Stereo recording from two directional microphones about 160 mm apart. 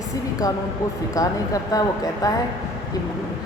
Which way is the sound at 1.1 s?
20° left (ahead or behind).